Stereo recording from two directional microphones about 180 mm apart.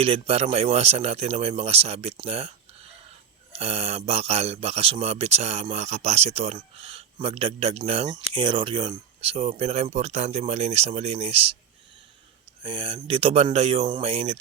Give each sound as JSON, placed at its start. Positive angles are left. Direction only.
{"t": 0.0, "sound": "speech", "side_deg": -30}
{"t": 12.6, "sound": "speech", "side_deg": -30}